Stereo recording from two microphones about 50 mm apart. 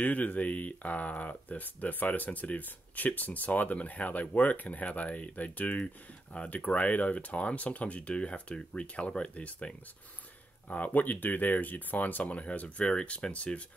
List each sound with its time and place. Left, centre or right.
0.0 s speech: left